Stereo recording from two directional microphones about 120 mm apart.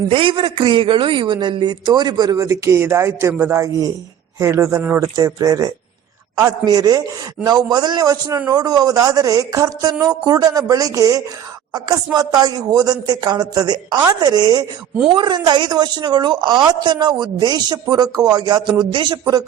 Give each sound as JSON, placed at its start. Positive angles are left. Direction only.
{"t": 0.1, "sound": "a woman's voice", "side_deg": -45}
{"t": 5.1, "sound": "a woman's voice", "side_deg": -30}